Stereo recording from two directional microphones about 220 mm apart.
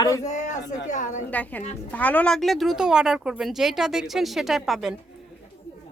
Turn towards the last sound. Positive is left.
turn(degrees=0)  # may be behind; listen again after turning